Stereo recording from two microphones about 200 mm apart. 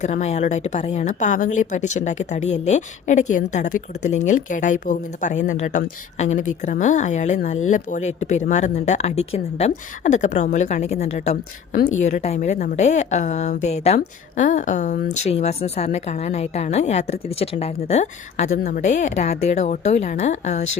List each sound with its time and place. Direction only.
0.0 s a woman's voice: 35° left (ahead or behind)